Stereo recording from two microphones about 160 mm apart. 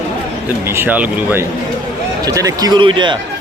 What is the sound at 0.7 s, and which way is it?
Speech, 10° right (ahead or behind).